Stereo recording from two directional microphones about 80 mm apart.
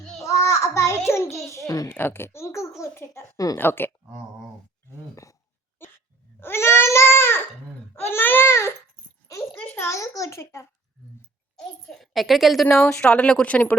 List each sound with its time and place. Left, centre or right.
0.0 s child singing: centre
0.3 s child singing: left
1.5 s a sound: left
1.9 s a child's voice: left
3.3 s speech: left
3.6 s baby cry: left
5.1 s a sound: left
6.4 s babbling: left
7.9 s baby cry: left
9.5 s a sound: centre
9.7 s a child's voice: left
11.5 s a child's voice: centre
12.9 s speech: centre